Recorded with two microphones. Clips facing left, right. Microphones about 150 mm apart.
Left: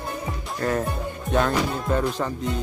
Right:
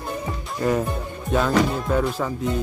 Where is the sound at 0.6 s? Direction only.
10° right (ahead or behind).